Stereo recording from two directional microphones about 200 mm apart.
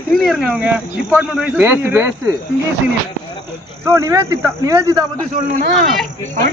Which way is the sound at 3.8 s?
15° right (ahead or behind).